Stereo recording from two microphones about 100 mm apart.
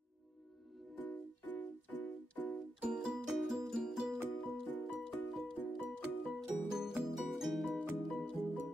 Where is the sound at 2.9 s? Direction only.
5° right (ahead or behind).